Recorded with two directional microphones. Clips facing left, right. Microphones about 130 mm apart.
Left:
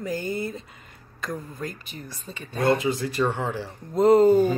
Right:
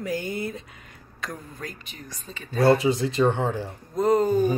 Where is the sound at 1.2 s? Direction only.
Centre (ahead or behind).